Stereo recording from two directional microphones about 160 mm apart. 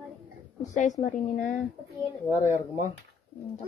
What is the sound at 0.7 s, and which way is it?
A woman's voice, 50° left (ahead or behind).